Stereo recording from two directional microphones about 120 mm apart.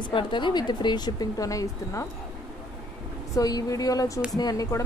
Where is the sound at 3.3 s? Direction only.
30° left (ahead or behind).